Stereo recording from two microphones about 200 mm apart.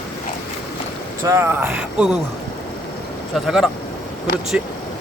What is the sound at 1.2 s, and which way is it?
Speech, 15° right (ahead or behind).